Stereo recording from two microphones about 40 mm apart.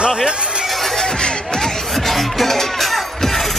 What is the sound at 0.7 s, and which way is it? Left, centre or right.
Music, centre.